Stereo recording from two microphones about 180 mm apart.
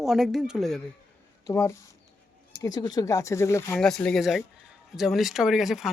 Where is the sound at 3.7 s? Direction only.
5° left (ahead or behind).